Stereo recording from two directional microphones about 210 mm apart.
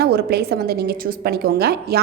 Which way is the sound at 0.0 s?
50° right (ahead or behind).